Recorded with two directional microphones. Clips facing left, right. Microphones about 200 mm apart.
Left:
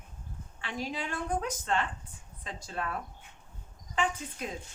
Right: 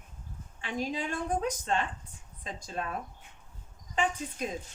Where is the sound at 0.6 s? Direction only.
15° right (ahead or behind).